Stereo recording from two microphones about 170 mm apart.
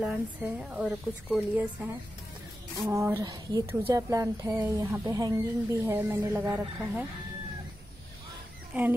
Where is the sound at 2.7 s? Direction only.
15° right (ahead or behind).